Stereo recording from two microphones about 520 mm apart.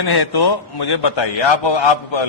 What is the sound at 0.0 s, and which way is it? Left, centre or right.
A man's voice, left.